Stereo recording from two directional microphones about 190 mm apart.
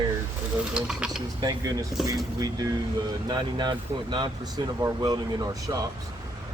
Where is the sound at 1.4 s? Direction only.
20° right (ahead or behind).